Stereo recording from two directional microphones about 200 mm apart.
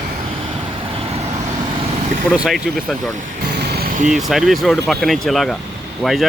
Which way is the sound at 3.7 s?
50° right (ahead or behind).